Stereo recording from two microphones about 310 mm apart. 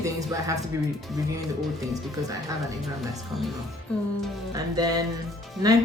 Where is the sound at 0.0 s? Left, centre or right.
Centre.